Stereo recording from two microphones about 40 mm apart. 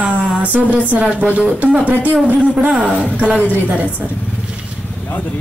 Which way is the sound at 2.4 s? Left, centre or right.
Right.